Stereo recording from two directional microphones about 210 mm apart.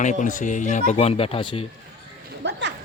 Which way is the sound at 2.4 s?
55° right (ahead or behind).